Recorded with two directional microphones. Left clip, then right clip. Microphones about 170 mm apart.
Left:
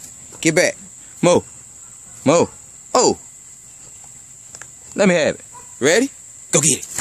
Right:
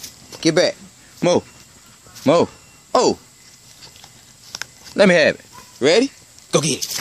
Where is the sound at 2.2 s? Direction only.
20° left (ahead or behind).